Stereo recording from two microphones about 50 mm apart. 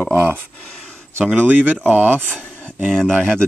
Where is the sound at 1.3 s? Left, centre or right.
Right.